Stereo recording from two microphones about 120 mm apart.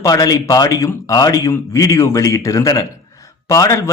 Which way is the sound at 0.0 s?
30° left (ahead or behind).